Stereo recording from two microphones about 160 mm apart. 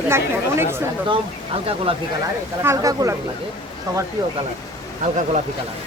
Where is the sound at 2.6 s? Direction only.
20° right (ahead or behind).